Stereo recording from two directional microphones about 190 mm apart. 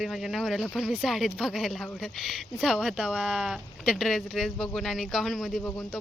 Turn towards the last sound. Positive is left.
turn(degrees=0)  # may be behind; listen again after turning